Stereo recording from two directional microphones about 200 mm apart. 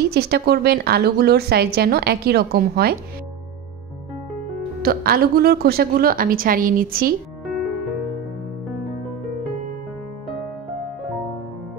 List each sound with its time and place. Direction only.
0.1 s a woman's voice: 55° right (ahead or behind)
4.8 s a woman's voice: 50° right (ahead or behind)